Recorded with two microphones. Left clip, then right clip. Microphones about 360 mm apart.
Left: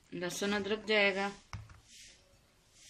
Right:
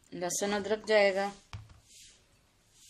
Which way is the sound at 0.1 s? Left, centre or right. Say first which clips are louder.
Right 3 dB; centre.